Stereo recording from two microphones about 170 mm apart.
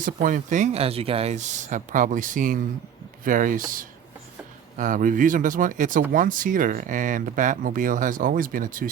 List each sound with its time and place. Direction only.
0.0 s speech: 50° right (ahead or behind)
4.8 s speech: 50° right (ahead or behind)